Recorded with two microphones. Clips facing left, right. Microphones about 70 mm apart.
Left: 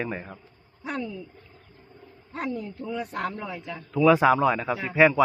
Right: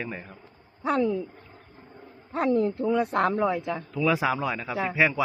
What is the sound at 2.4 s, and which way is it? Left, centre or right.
Speech, right.